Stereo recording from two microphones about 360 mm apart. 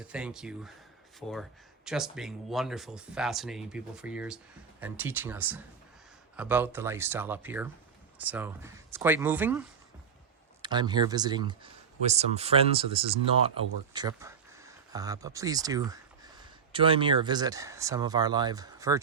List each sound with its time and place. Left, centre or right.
0.1 s speech: centre